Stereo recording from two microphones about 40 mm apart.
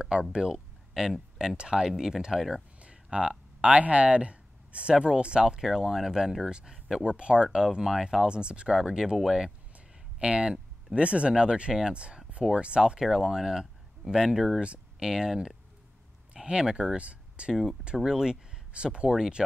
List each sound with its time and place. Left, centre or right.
0.0 s speech: right
1.9 s speech: centre
2.5 s a sound: right
5.0 s speech: right
7.2 s speech: right; by 9.5 s centre
10.1 s speech: right
13.0 s speech: centre
14.6 s speech: right
15.0 s speech: centre; by 17.5 s right
17.5 s speech: centre
18.7 s speech: right